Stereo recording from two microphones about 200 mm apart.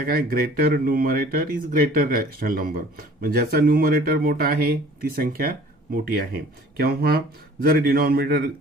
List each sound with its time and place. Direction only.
0.0 s speech: 45° right (ahead or behind)